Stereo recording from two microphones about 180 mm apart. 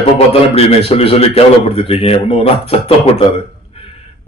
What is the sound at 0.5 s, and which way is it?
A man's voice, 35° left (ahead or behind).